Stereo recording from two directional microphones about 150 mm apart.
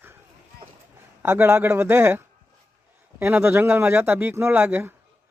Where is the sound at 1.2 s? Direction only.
15° right (ahead or behind).